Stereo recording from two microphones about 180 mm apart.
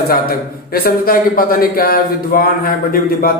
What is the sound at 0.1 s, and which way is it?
A man's voice, 55° left (ahead or behind).